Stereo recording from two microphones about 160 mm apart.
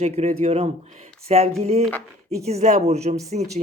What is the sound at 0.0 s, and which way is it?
Speech, 45° right (ahead or behind).